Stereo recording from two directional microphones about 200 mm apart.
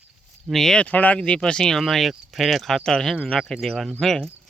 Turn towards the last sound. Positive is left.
turn(degrees=5)  # may be behind; listen again after turning